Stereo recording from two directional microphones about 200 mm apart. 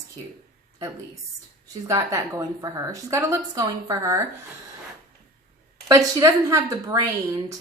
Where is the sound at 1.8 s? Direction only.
15° right (ahead or behind).